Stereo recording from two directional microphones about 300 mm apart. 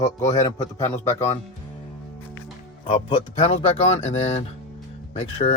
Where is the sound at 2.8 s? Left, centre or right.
Centre.